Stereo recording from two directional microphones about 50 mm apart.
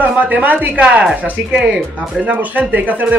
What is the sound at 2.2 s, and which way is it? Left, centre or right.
Speech, right.